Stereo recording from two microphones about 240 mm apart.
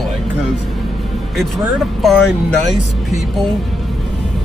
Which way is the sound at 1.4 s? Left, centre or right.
Centre.